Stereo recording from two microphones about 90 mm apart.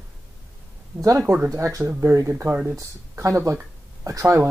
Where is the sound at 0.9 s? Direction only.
5° right (ahead or behind).